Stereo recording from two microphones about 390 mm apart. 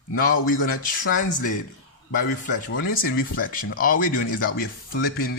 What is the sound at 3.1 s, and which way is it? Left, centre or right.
Speech, left.